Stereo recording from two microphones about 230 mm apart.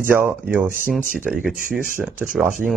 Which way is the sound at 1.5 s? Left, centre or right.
Right.